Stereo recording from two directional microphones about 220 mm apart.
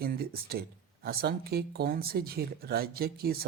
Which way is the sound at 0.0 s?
45° right (ahead or behind).